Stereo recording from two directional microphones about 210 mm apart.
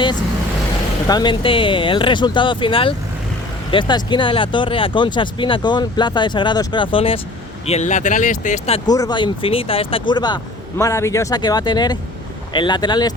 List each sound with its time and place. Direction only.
1.0 s speech: 20° left (ahead or behind)
8.9 s speech: 20° left (ahead or behind)